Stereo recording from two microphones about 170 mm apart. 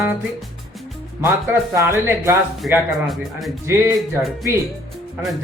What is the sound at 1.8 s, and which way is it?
Speech, 15° right (ahead or behind).